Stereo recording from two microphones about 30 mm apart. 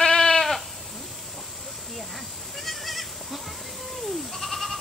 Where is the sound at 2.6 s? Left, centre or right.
Centre.